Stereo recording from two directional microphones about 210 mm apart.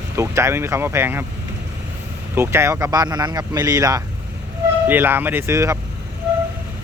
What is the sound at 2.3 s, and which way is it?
Speech, 10° right (ahead or behind).